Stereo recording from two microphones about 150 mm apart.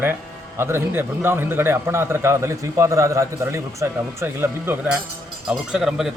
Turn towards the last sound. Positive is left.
turn(degrees=-5)  # may be behind; listen again after turning